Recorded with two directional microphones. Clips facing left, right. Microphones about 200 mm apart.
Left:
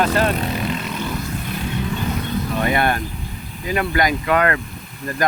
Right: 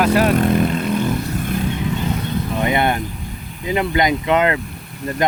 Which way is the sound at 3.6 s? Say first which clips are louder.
Right 2 dB; 20° right (ahead or behind).